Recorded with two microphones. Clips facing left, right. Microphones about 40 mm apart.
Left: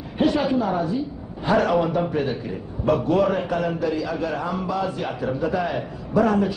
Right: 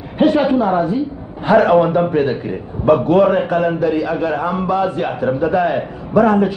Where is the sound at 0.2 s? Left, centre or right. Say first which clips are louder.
Right 7 dB; right.